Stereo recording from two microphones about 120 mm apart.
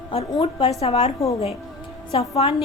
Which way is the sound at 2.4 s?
50° left (ahead or behind).